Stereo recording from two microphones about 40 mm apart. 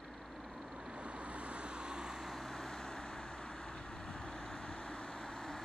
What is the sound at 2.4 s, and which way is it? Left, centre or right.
Vehicle, centre.